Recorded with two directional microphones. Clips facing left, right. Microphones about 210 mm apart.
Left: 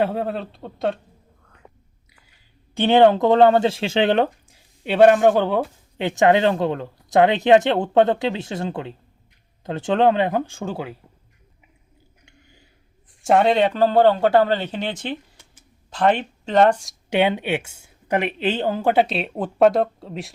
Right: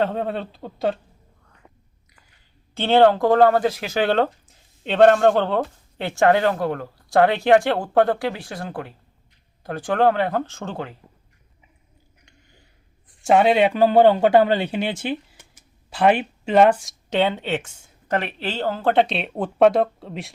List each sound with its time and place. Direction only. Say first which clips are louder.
0.0 s speech: left 1 dB; 5° left (ahead or behind)
2.7 s speech: left 1 dB; 15° left (ahead or behind)
13.2 s speech: right 1 dB; 5° right (ahead or behind)
17.1 s speech: left 2 dB; 15° left (ahead or behind)